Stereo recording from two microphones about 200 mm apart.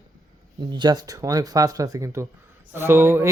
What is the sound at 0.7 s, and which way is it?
Speech, 20° right (ahead or behind).